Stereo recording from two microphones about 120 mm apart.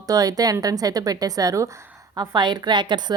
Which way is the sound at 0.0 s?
30° right (ahead or behind).